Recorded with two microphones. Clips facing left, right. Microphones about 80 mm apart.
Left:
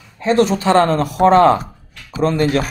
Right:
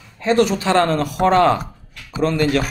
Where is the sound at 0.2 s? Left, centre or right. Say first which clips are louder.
Left 2 dB; left.